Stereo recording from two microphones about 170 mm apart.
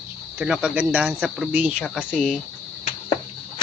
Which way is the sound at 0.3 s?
5° right (ahead or behind).